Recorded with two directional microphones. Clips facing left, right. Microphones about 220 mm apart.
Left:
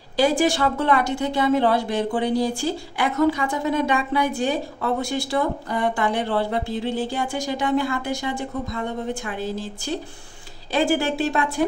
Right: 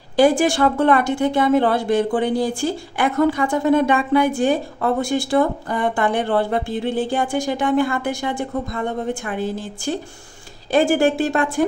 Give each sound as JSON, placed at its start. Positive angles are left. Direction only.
{"t": 0.1, "sound": "speech", "side_deg": -50}